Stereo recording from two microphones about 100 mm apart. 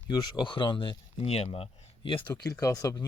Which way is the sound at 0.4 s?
50° left (ahead or behind).